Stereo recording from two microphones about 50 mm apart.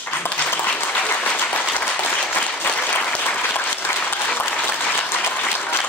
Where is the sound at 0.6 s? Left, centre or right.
Left.